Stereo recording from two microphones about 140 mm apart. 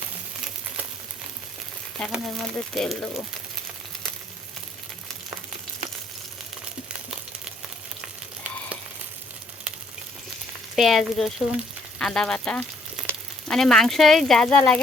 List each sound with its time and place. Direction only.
2.0 s speech: centre (ahead or behind)
10.8 s speech: centre (ahead or behind)